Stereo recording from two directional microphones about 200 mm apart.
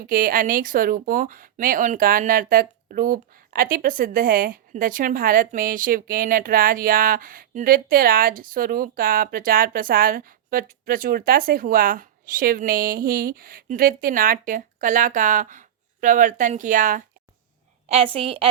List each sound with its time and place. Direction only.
0.1 s speech: 45° right (ahead or behind)
17.8 s a woman's voice: 30° right (ahead or behind)